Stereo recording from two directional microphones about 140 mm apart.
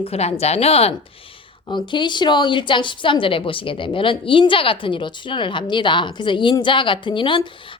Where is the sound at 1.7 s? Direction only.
35° left (ahead or behind).